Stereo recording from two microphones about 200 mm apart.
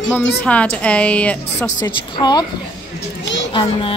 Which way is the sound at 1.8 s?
20° left (ahead or behind).